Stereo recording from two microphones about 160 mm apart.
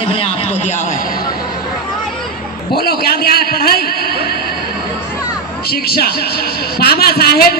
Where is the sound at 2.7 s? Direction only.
75° left (ahead or behind).